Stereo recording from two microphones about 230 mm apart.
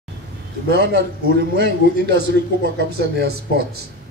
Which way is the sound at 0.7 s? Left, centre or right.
Right.